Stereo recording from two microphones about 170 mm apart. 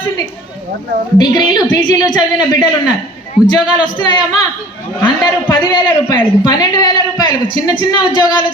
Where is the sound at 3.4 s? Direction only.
25° left (ahead or behind).